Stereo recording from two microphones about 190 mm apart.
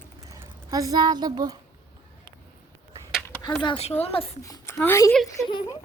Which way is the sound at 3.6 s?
30° left (ahead or behind).